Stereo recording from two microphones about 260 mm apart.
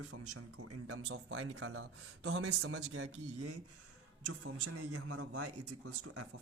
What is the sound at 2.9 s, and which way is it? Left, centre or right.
Speech, right.